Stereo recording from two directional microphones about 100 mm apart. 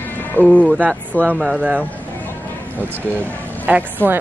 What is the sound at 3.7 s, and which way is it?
Speech, 15° right (ahead or behind).